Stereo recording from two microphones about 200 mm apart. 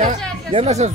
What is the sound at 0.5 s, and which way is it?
Speech, 35° right (ahead or behind).